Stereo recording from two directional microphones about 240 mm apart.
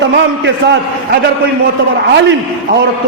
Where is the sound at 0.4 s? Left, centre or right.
Right.